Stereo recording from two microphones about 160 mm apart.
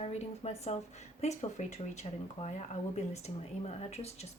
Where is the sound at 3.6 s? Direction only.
40° left (ahead or behind).